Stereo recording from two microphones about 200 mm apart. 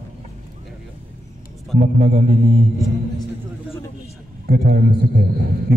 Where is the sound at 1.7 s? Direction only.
40° right (ahead or behind).